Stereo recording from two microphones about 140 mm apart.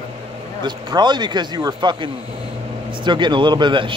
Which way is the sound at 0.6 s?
35° right (ahead or behind).